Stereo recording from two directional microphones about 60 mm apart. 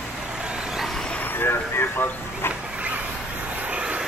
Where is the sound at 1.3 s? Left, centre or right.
Left.